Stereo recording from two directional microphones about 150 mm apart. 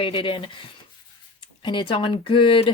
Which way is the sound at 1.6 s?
35° left (ahead or behind).